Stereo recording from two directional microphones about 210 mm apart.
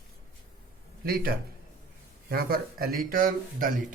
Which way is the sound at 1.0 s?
45° right (ahead or behind).